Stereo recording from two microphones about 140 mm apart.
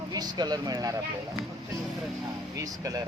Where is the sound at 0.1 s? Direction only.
30° right (ahead or behind).